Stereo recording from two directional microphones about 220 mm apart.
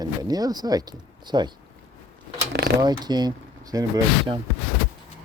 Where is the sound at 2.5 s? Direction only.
45° right (ahead or behind).